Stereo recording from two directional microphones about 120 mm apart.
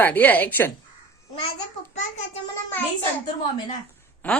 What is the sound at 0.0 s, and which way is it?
Child singing, 15° left (ahead or behind).